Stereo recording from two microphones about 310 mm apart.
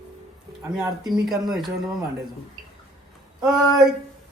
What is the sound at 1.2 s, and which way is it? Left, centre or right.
Speech, centre.